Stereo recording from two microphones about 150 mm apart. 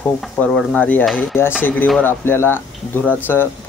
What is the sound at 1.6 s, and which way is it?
Speech, 10° left (ahead or behind).